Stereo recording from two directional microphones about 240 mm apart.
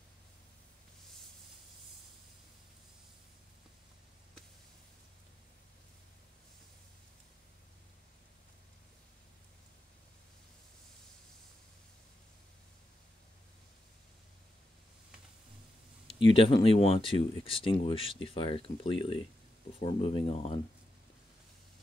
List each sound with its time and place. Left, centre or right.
16.2 s speech: left